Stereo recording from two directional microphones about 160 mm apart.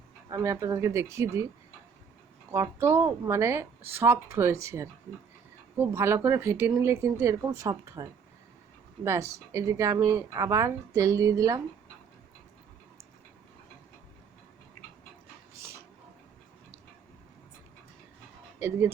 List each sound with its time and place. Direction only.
0.3 s speech: 20° right (ahead or behind)
2.5 s speech: 15° right (ahead or behind)
9.0 s speech: 20° right (ahead or behind)